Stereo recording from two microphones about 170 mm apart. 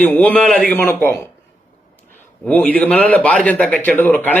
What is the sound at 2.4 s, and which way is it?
Speech, 10° left (ahead or behind).